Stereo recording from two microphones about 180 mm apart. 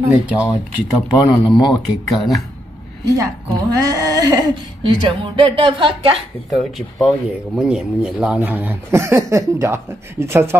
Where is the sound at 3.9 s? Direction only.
20° right (ahead or behind).